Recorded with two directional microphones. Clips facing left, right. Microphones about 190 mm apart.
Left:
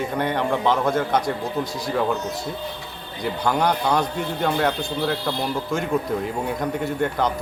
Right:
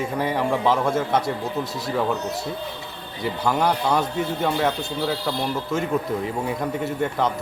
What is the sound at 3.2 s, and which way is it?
A man's voice, centre (ahead or behind).